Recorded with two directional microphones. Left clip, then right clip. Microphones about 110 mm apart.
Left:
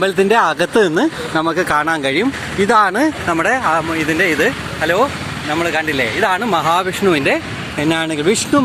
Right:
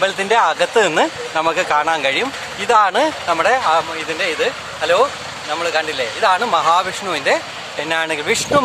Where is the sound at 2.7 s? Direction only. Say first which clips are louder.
Even; 20° left (ahead or behind).